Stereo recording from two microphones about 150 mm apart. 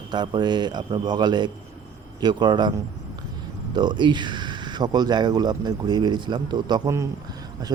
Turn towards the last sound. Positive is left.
turn(degrees=-30)  # may be behind; listen again after turning